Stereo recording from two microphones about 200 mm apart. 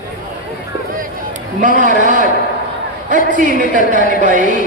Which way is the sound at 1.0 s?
40° right (ahead or behind).